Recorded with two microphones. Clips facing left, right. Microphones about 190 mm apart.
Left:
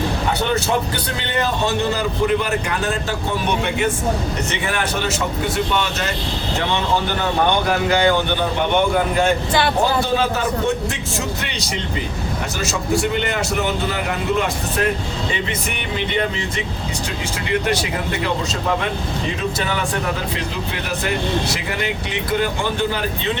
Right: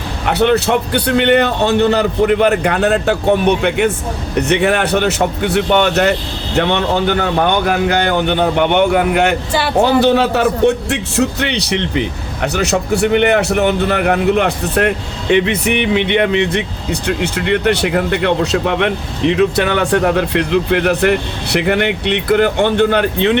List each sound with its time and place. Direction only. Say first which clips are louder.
0.3 s speech: right 10 dB; 70° right (ahead or behind)